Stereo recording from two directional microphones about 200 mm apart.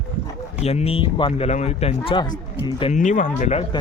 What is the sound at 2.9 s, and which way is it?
Speech, 40° left (ahead or behind).